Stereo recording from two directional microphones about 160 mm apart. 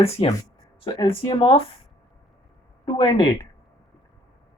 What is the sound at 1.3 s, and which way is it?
Speech, 30° left (ahead or behind).